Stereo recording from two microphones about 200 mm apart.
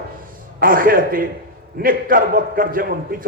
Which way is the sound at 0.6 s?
45° right (ahead or behind).